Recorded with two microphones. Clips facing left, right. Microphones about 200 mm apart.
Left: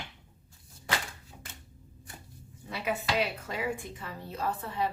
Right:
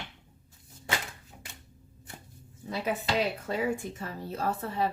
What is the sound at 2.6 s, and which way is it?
A woman's voice, 35° right (ahead or behind).